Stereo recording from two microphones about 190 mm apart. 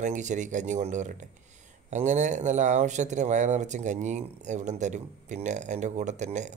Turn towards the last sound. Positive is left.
turn(degrees=-40)  # may be behind; listen again after turning